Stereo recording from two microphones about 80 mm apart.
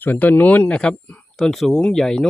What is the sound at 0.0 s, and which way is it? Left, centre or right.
Speech, left.